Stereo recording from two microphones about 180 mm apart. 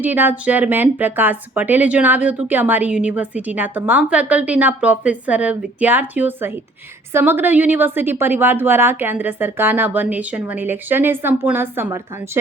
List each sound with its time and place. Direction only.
0.0 s speech: 10° right (ahead or behind)